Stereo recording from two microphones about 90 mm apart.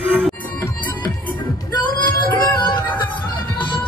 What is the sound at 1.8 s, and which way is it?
Music, 55° left (ahead or behind).